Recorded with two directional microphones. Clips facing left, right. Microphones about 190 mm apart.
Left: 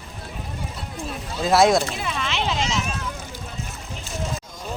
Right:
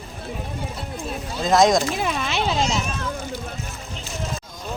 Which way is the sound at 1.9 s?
45° right (ahead or behind).